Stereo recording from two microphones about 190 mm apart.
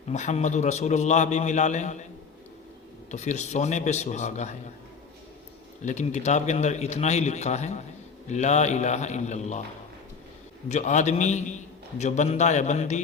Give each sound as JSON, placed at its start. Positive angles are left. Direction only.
{"t": 0.1, "sound": "a man's voice", "side_deg": 35}
{"t": 3.1, "sound": "a man's voice", "side_deg": 40}
{"t": 5.8, "sound": "a man's voice", "side_deg": 40}
{"t": 10.7, "sound": "a man's voice", "side_deg": 40}